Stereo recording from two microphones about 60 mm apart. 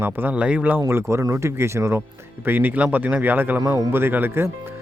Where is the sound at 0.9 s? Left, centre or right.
Right.